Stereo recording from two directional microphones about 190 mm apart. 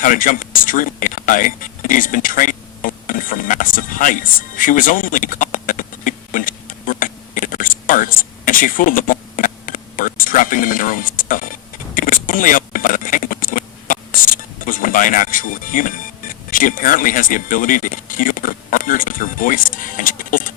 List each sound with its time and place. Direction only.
0.0 s speech: 45° left (ahead or behind)